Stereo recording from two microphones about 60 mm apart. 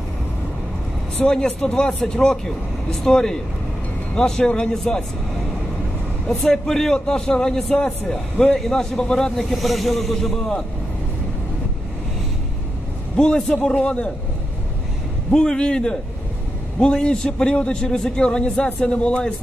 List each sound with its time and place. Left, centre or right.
1.2 s speech: centre
6.2 s speech: centre
9.4 s speech: centre
13.1 s speech: centre
15.3 s speech: centre